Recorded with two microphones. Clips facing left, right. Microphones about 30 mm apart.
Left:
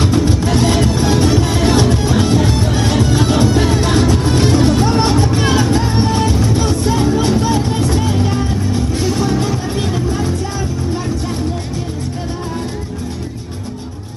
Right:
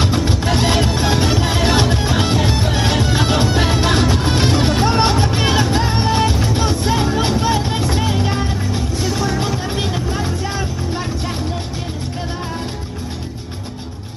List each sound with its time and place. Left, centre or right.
0.0 s music: centre
9.8 s music: centre